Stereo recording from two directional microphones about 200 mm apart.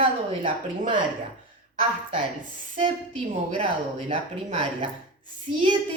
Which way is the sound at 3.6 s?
30° right (ahead or behind).